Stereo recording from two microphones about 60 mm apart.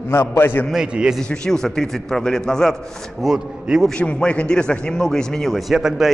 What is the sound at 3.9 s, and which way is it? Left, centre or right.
A man's voice, centre.